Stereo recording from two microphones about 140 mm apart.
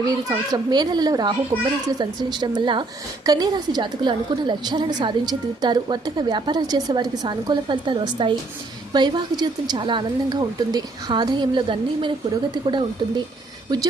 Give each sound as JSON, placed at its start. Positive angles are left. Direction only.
{"t": 0.0, "sound": "a child's voice", "side_deg": -25}